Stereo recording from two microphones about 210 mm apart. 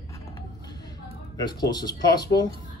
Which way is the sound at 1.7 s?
20° left (ahead or behind).